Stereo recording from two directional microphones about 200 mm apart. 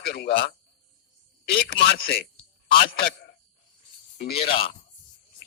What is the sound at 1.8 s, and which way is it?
Speech, 50° left (ahead or behind).